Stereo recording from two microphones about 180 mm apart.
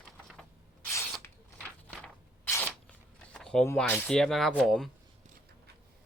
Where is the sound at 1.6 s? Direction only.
5° left (ahead or behind).